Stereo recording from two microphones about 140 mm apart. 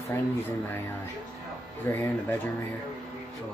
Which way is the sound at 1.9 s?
15° left (ahead or behind).